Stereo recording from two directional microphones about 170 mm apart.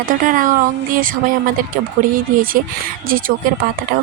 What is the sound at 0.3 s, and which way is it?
Speech, 50° right (ahead or behind).